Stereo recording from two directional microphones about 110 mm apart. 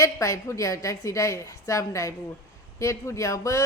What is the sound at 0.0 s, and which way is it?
Speech, 30° left (ahead or behind).